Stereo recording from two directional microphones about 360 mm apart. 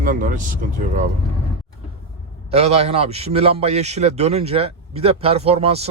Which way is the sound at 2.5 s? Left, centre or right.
Centre.